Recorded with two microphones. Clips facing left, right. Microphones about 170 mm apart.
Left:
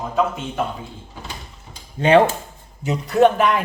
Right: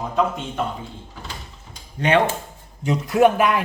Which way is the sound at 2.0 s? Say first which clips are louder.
Left 5 dB; 30° left (ahead or behind).